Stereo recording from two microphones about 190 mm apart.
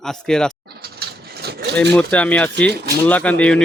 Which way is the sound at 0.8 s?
55° right (ahead or behind).